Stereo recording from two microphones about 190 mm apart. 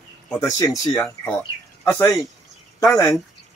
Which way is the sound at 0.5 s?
20° left (ahead or behind).